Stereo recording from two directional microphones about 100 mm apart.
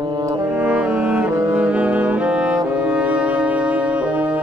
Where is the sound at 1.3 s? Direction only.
25° right (ahead or behind).